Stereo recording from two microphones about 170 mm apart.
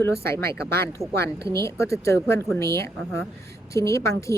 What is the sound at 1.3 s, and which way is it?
Speech, 15° left (ahead or behind).